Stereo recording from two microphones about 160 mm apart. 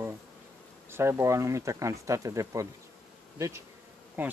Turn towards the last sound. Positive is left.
turn(degrees=-10)  # may be behind; listen again after turning